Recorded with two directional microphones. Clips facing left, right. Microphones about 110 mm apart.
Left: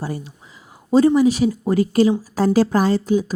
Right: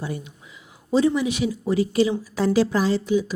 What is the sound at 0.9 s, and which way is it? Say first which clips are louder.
Speech: left 6 dB; 45° left (ahead or behind).